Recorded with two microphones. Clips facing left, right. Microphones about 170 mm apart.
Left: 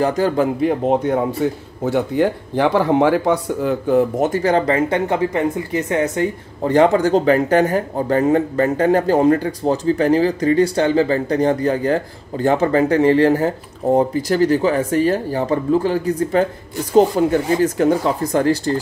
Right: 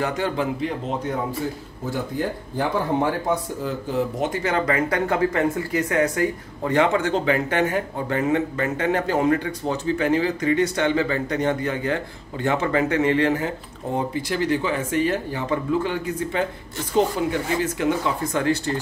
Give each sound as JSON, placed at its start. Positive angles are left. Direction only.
{"t": 0.0, "sound": "speech", "side_deg": 40}
{"t": 0.6, "sound": "speech", "side_deg": 55}
{"t": 1.4, "sound": "speech", "side_deg": 65}
{"t": 4.3, "sound": "speech", "side_deg": 35}